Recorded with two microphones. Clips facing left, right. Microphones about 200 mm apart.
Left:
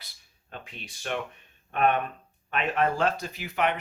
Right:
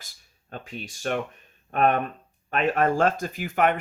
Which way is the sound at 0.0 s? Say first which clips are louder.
Right 2 dB; 45° right (ahead or behind).